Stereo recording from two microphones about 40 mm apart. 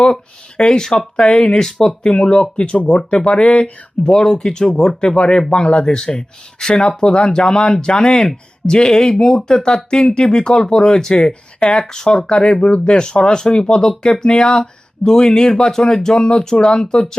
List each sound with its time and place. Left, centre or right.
0.5 s speech: left
0.8 s speech: centre
1.2 s speech: left
1.5 s speech: centre
2.0 s speech: left
4.0 s speech: centre